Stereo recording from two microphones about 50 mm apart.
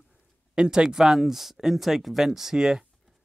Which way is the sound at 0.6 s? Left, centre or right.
Centre.